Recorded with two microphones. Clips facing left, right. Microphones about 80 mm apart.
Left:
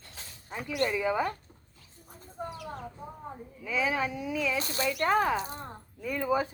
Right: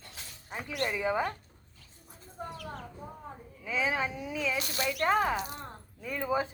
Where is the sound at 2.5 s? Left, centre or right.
Centre.